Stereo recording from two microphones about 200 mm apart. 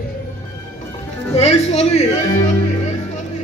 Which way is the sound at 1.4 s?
30° left (ahead or behind).